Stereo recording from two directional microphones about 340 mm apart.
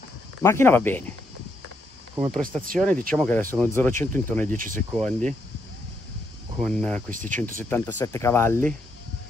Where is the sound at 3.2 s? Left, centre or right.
Centre.